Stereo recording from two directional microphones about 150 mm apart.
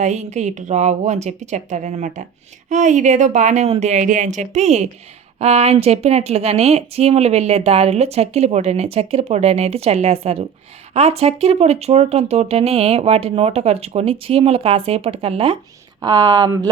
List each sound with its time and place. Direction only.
0.0 s speech: 50° right (ahead or behind)
16.0 s a woman's voice: 25° right (ahead or behind)